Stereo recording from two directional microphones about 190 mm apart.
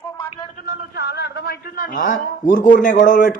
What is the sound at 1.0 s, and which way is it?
A man's voice, 60° left (ahead or behind).